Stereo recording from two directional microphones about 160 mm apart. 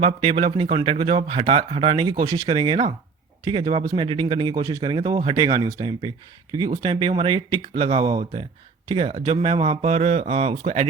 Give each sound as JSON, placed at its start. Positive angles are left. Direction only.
{"t": 0.0, "sound": "a man's voice", "side_deg": -35}
{"t": 6.7, "sound": "a man's voice", "side_deg": -35}